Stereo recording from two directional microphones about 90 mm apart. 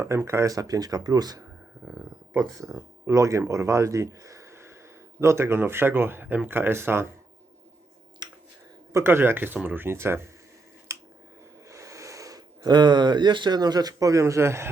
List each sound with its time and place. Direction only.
0.0 s speech: 30° right (ahead or behind)
2.6 s speech: 35° right (ahead or behind)
8.2 s a sound: 50° right (ahead or behind)
8.9 s speech: 30° right (ahead or behind)
10.9 s finger snapping: 35° right (ahead or behind)
11.7 s speech: 35° right (ahead or behind)